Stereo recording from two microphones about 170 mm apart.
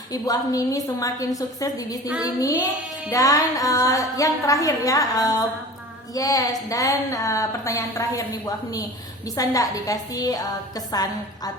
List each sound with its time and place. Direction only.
0.1 s a woman's voice: 20° left (ahead or behind)